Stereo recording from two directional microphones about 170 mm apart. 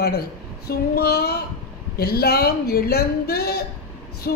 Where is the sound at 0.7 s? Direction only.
70° left (ahead or behind).